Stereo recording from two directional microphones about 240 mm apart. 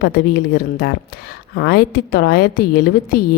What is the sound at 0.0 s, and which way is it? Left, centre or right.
Speech, left.